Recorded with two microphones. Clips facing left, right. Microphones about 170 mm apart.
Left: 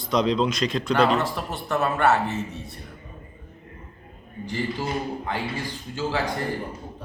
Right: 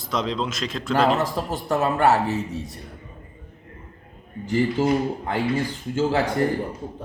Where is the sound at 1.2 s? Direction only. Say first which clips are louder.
Right 2 dB; 40° right (ahead or behind).